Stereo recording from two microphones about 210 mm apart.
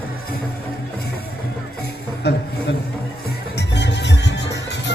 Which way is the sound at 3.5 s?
55° left (ahead or behind).